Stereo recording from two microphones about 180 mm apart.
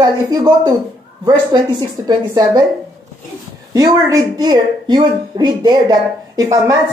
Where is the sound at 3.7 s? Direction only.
20° right (ahead or behind).